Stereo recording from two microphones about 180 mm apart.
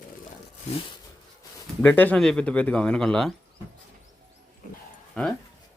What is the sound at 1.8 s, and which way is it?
Speech, 10° left (ahead or behind).